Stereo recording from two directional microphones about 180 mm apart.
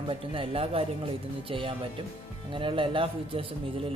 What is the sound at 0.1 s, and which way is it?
Speech, 30° right (ahead or behind).